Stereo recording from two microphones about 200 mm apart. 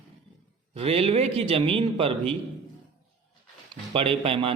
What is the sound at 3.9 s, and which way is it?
Speech, 30° right (ahead or behind).